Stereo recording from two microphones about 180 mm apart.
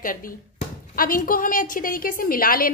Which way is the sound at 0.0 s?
50° left (ahead or behind).